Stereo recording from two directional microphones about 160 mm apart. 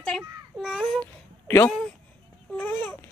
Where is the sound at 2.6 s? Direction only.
10° left (ahead or behind).